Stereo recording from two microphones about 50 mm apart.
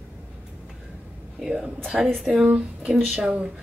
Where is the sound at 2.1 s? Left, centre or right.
Centre.